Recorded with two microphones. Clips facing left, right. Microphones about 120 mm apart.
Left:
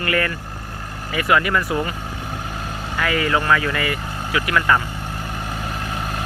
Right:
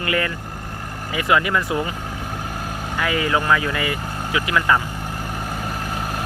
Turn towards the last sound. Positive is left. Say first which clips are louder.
# even
turn(degrees=-5)  # may be behind; listen again after turning